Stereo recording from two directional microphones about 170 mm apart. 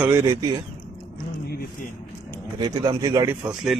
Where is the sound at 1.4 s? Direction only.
65° left (ahead or behind).